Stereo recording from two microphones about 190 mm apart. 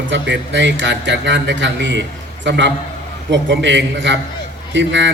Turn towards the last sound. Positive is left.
turn(degrees=-70)  # may be behind; listen again after turning